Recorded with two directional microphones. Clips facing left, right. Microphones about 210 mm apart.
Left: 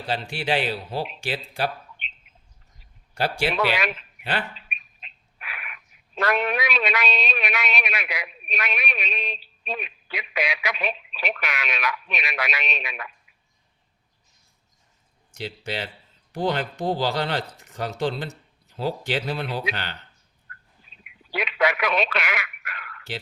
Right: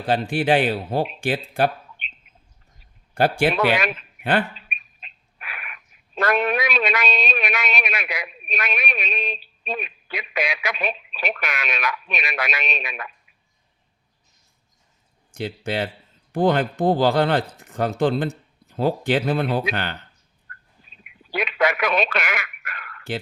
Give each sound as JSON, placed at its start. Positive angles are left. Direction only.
{"t": 0.1, "sound": "speech", "side_deg": -50}
{"t": 3.2, "sound": "speech", "side_deg": -55}
{"t": 15.3, "sound": "speech", "side_deg": -50}
{"t": 20.5, "sound": "bird", "side_deg": -45}
{"t": 21.3, "sound": "speech", "side_deg": -45}